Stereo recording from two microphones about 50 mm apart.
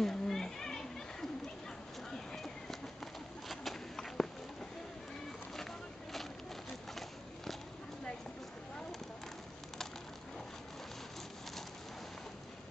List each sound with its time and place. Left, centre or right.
0.0 s children playing: centre
2.1 s bird: centre